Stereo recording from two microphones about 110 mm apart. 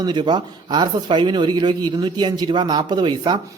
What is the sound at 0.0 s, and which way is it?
Speech, 40° right (ahead or behind).